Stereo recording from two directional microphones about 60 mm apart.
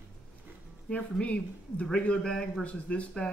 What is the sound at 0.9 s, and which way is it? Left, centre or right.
Speech, centre.